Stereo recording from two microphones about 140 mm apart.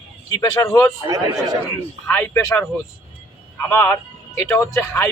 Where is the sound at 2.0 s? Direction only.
15° left (ahead or behind).